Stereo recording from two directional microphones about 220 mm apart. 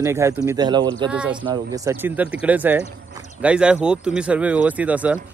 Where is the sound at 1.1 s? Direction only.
5° right (ahead or behind).